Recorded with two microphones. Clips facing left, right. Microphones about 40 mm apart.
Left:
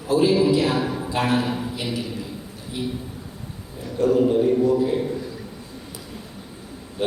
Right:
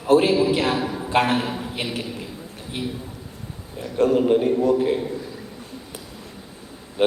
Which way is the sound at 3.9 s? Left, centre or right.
Right.